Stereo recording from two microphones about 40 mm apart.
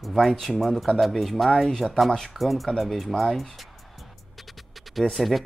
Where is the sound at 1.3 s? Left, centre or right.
Centre.